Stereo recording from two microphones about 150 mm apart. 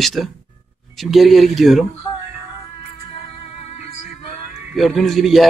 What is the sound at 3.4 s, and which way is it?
Music, 45° left (ahead or behind).